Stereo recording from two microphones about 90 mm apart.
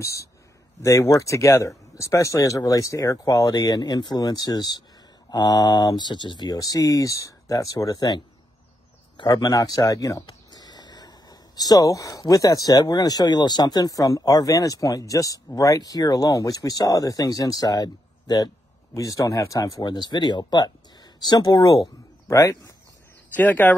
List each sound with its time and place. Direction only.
0.0 s speech: 35° left (ahead or behind)
9.3 s speech: 40° left (ahead or behind)
19.8 s speech: 55° left (ahead or behind)
22.3 s speech: 35° left (ahead or behind)
23.3 s speech: 20° left (ahead or behind)